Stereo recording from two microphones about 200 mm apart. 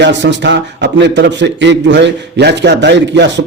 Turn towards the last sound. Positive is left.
turn(degrees=-60)  # may be behind; listen again after turning